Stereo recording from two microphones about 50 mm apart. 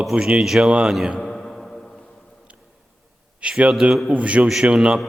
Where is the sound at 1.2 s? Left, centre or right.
Centre.